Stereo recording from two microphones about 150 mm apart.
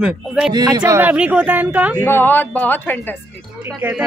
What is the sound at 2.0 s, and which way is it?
A man's voice, 15° left (ahead or behind).